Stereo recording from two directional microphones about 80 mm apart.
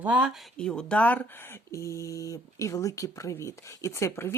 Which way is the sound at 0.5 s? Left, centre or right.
Centre.